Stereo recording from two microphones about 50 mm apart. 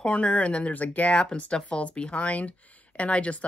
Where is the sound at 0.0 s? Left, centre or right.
Left.